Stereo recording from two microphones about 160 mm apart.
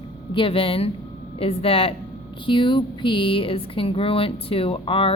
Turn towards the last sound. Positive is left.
turn(degrees=35)  # may be behind; listen again after turning